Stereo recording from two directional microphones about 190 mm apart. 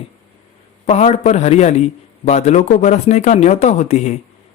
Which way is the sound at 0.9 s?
35° left (ahead or behind).